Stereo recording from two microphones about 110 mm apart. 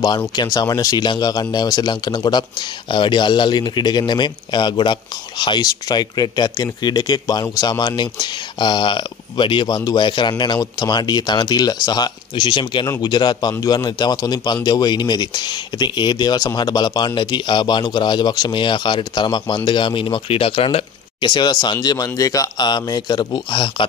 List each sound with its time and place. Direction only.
0.4 s a man's voice: 35° left (ahead or behind)